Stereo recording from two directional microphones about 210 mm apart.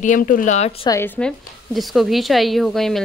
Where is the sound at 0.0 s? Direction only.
40° left (ahead or behind).